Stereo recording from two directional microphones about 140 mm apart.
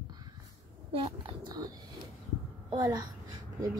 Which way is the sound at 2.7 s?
30° right (ahead or behind).